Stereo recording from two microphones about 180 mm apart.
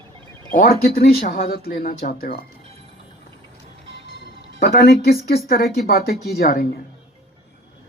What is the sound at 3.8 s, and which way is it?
Music, 90° right.